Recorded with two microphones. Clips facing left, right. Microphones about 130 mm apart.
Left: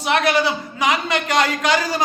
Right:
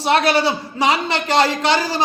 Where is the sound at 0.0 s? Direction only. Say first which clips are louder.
Right 2 dB; 30° right (ahead or behind).